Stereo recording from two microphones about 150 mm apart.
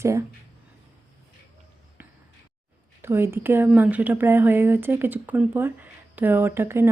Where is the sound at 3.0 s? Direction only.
15° right (ahead or behind).